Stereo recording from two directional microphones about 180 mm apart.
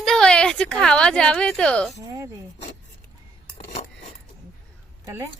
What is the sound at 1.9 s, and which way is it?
Speech, 20° right (ahead or behind).